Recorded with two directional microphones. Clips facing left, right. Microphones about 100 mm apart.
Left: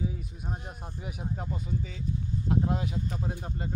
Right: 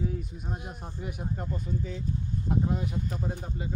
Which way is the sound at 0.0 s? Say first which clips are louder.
Right 2 dB; 5° left (ahead or behind).